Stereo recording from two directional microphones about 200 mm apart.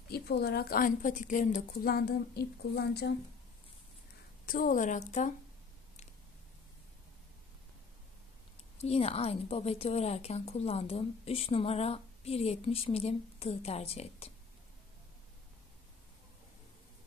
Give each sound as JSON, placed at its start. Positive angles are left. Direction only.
{"t": 0.1, "sound": "a woman's voice", "side_deg": 50}
{"t": 4.5, "sound": "a woman's voice", "side_deg": 45}
{"t": 8.8, "sound": "a woman's voice", "side_deg": 30}